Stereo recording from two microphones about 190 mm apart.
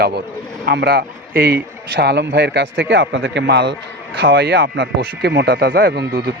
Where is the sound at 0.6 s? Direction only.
60° right (ahead or behind).